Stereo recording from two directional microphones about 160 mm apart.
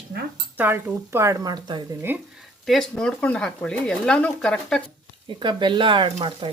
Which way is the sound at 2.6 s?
5° left (ahead or behind).